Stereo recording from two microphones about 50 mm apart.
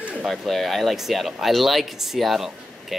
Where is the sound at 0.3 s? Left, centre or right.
Centre.